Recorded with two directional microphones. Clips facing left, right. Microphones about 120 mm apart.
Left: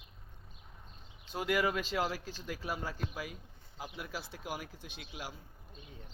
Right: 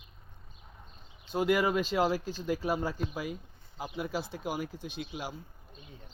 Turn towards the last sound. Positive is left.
turn(degrees=-25)  # may be behind; listen again after turning